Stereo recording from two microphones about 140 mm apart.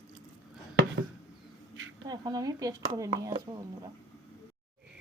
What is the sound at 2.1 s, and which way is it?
Speech, 25° right (ahead or behind).